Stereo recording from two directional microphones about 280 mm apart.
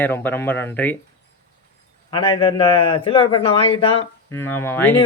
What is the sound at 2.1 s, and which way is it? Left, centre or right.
A man's voice, centre.